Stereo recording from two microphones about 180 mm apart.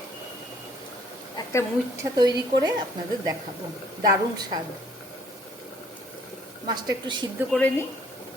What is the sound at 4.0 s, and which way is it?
Speech, 20° right (ahead or behind).